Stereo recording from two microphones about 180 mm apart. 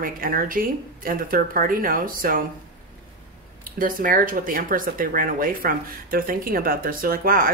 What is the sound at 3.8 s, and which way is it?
Speech, 50° right (ahead or behind).